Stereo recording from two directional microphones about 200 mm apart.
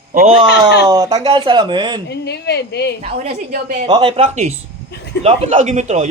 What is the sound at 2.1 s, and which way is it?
Speech, 55° left (ahead or behind).